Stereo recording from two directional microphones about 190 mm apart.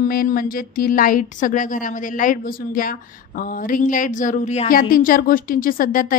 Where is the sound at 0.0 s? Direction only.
50° left (ahead or behind).